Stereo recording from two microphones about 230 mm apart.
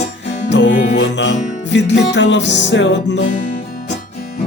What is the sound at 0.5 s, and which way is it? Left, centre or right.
Music, left.